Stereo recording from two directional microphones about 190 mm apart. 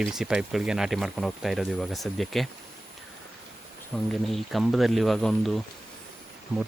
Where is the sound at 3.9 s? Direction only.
Centre (ahead or behind).